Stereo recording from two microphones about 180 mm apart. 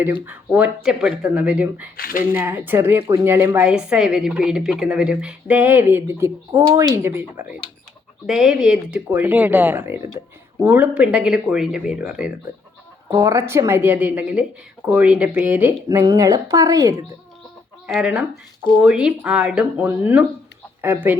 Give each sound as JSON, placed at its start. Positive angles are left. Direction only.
{"t": 0.0, "sound": "a woman's voice", "side_deg": -10}
{"t": 2.0, "sound": "speech", "side_deg": 55}
{"t": 2.3, "sound": "a woman's voice", "side_deg": -10}
{"t": 17.8, "sound": "a woman's voice", "side_deg": -5}